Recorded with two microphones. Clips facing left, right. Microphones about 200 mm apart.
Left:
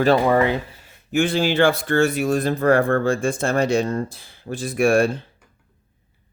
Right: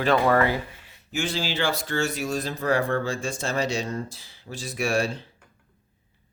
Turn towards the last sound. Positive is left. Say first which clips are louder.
# left 8 dB
turn(degrees=55)  # may be behind; listen again after turning